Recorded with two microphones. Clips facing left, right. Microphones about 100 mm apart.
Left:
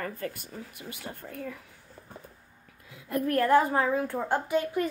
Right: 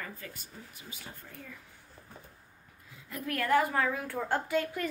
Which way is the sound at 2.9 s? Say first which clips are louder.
Left 12 dB; 65° left (ahead or behind).